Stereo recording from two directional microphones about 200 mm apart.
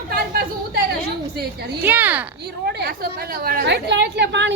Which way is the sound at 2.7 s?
50° right (ahead or behind).